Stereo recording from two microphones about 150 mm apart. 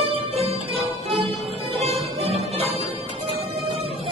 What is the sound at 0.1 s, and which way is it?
Music, 40° right (ahead or behind).